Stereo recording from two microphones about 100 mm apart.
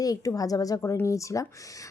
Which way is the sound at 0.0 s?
35° left (ahead or behind).